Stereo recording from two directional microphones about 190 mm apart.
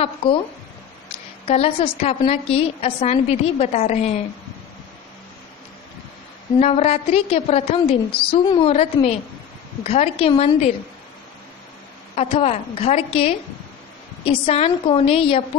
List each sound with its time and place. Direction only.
0.0 s a woman's voice: 30° left (ahead or behind)
1.5 s a woman's voice: 35° left (ahead or behind)
6.6 s a woman's voice: 35° left (ahead or behind)
12.2 s a woman's voice: 30° left (ahead or behind)